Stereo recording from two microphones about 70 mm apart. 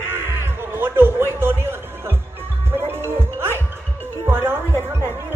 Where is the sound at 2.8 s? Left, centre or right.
Right.